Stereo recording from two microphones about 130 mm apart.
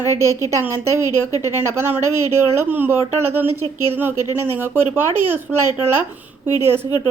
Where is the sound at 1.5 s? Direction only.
20° right (ahead or behind).